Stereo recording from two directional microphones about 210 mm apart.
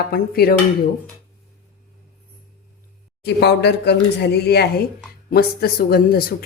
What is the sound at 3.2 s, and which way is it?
A woman's voice, 50° left (ahead or behind).